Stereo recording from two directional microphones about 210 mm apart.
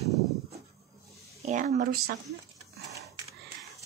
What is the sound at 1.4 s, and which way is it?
Speech, 35° right (ahead or behind).